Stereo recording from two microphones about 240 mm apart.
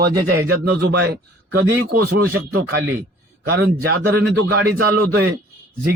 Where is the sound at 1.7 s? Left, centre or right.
Right.